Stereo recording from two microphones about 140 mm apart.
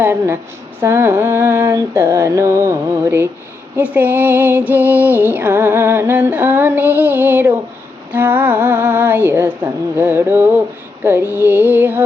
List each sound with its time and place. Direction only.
0.0 s music: 15° right (ahead or behind)